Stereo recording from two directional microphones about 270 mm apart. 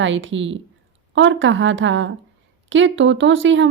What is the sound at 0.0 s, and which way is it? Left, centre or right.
A woman's voice, right.